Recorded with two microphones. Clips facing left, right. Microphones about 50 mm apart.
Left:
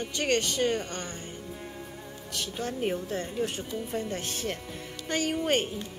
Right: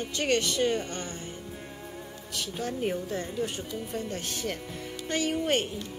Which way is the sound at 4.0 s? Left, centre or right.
Left.